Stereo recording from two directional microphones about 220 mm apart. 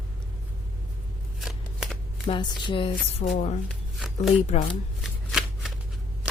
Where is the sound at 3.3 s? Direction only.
30° left (ahead or behind).